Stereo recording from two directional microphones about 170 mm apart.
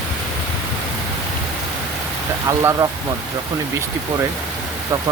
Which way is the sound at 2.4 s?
20° right (ahead or behind).